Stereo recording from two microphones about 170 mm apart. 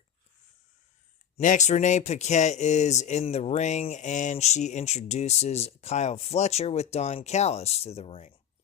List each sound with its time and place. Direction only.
1.4 s speech: 45° left (ahead or behind)